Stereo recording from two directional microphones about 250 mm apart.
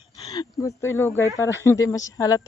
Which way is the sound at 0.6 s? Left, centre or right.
Centre.